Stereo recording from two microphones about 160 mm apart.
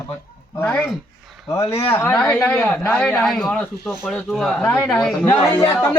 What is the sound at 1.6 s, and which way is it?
Speech, 35° left (ahead or behind).